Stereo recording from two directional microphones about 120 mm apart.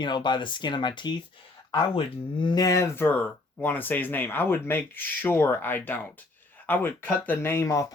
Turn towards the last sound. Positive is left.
turn(degrees=25)  # may be behind; listen again after turning